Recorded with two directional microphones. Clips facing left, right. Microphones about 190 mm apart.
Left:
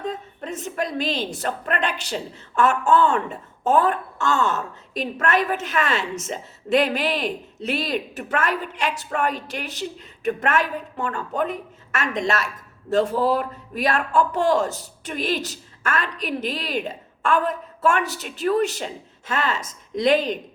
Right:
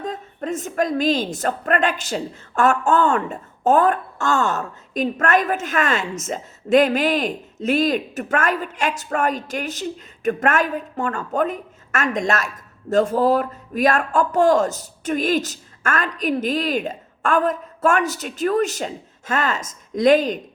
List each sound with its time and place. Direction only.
0.0 s a woman's voice: 45° right (ahead or behind)